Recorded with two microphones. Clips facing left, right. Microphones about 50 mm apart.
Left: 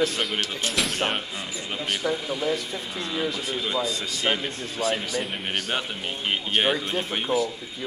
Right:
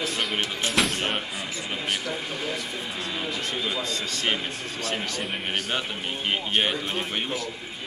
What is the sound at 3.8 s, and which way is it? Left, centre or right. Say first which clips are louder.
A man's voice: left 2 dB; centre.